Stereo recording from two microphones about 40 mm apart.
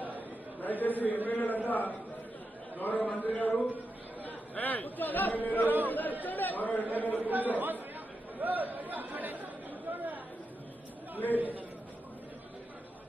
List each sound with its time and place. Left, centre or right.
0.6 s a man's voice: left
7.2 s a man's voice: right
8.4 s chatter: right
11.3 s a man's voice: right